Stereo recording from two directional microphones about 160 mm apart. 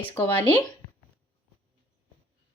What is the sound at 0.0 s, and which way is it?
Speech, 10° left (ahead or behind).